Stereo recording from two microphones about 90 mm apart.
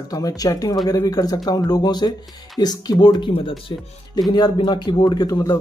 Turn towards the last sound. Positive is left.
turn(degrees=45)  # may be behind; listen again after turning